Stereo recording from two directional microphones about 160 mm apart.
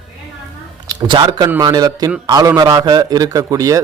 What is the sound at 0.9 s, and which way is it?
Speech, 30° right (ahead or behind).